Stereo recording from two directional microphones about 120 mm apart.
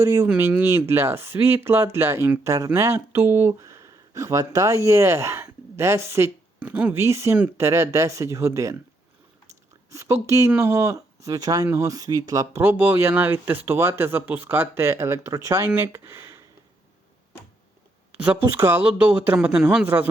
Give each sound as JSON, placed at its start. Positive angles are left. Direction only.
{"t": 0.0, "sound": "speech", "side_deg": -20}
{"t": 7.3, "sound": "speech", "side_deg": -10}
{"t": 7.6, "sound": "speech", "side_deg": -25}
{"t": 9.9, "sound": "speech", "side_deg": -25}
{"t": 12.6, "sound": "speech", "side_deg": -15}
{"t": 18.1, "sound": "speech", "side_deg": -10}